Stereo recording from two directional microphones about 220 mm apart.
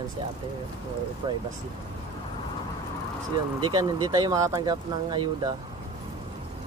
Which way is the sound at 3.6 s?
20° right (ahead or behind).